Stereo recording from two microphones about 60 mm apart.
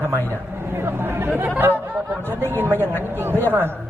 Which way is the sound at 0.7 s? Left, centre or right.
Right.